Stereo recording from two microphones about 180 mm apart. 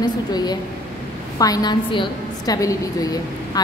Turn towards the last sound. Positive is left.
turn(degrees=20)  # may be behind; listen again after turning